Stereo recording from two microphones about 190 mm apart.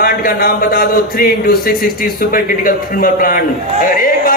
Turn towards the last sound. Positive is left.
turn(degrees=50)  # may be behind; listen again after turning